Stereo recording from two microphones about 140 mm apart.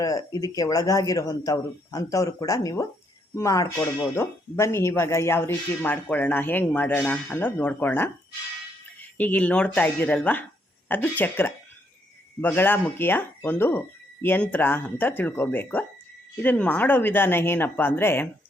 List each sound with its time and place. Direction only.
0.0 s speech: 25° left (ahead or behind)